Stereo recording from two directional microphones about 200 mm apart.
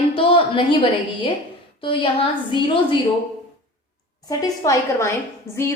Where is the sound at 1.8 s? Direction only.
25° left (ahead or behind).